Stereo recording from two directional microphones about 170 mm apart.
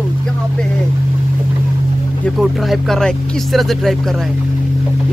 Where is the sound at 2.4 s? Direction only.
Centre (ahead or behind).